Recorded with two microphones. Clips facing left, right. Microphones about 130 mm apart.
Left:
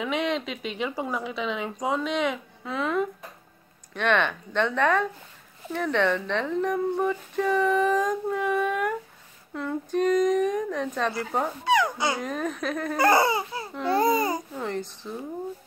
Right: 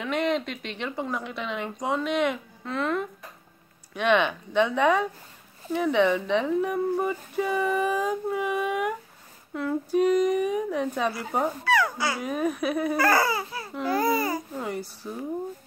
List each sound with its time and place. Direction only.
0.0 s a woman's voice: centre (ahead or behind)
3.9 s speech: 10° right (ahead or behind)
11.6 s speech: 20° left (ahead or behind)
12.2 s speech: 10° right (ahead or behind)
12.9 s speech: 25° left (ahead or behind)
14.6 s speech: 10° right (ahead or behind)